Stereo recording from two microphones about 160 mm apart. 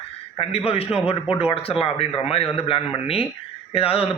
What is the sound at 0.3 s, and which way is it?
Speech, 35° left (ahead or behind).